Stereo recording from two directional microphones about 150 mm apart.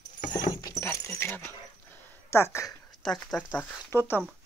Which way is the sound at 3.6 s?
10° left (ahead or behind).